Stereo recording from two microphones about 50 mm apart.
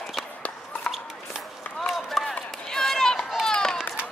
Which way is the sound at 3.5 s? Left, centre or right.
Centre.